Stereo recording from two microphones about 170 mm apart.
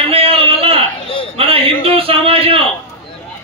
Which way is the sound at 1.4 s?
35° right (ahead or behind).